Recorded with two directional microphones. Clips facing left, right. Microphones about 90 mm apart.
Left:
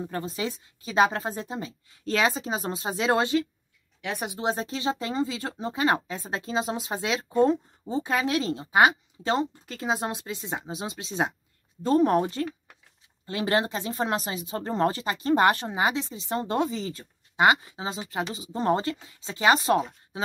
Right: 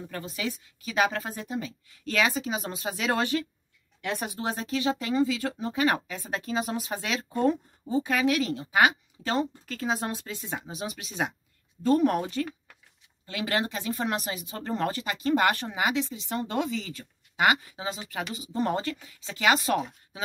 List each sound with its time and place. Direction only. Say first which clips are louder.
0.1 s speech: left 3 dB; 30° left (ahead or behind)
4.0 s speech: left 2 dB; 15° left (ahead or behind); by 19.8 s 30° left (ahead or behind)